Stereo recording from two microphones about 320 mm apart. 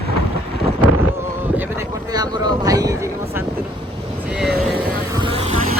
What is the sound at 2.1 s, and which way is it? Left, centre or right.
Vehicle, centre.